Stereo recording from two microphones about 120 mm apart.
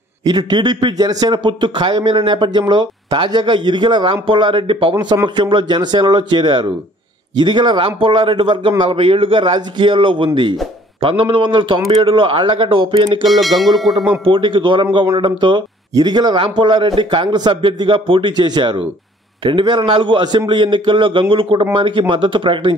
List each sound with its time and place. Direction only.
0.2 s a man's voice: 35° right (ahead or behind)
4.9 s a man's voice: 35° right (ahead or behind)
13.3 s tubular bells: centre (ahead or behind)
14.2 s a man's voice: 45° right (ahead or behind)